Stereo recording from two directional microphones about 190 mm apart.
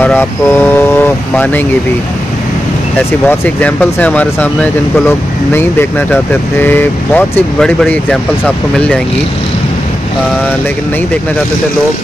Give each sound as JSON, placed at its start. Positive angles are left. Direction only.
{"t": 0.0, "sound": "speech", "side_deg": 10}
{"t": 3.1, "sound": "speech", "side_deg": 10}